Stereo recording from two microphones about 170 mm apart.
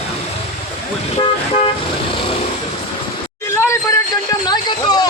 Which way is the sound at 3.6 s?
15° left (ahead or behind).